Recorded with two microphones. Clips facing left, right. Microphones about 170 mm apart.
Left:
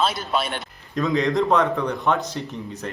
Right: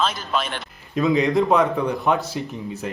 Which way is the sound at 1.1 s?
Centre (ahead or behind).